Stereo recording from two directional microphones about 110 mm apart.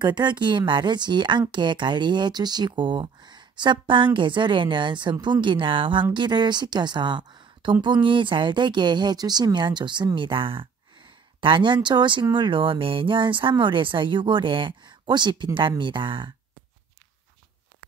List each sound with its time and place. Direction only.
0.0 s speech: 40° right (ahead or behind)